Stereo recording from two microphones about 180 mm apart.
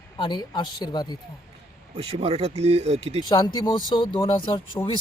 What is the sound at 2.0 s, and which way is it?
Speech, 35° right (ahead or behind).